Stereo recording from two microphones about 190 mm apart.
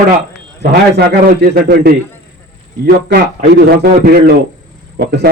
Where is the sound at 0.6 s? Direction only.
60° right (ahead or behind).